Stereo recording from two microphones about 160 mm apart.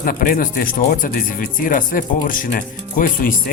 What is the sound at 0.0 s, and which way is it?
Speech, 60° left (ahead or behind).